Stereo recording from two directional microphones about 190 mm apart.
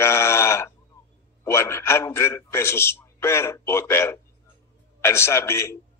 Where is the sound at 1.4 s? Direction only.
15° left (ahead or behind).